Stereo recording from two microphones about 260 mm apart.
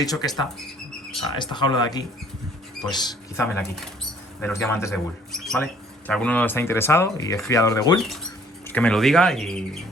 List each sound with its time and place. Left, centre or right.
0.0 s speech: centre
4.4 s speech: centre
7.9 s speech: centre